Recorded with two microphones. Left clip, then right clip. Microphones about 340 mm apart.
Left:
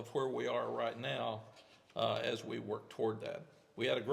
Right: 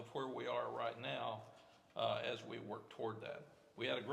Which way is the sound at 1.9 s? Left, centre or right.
Left.